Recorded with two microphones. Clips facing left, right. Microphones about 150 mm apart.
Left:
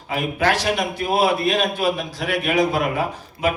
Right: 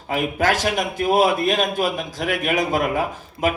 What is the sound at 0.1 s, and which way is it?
Speech, 45° right (ahead or behind).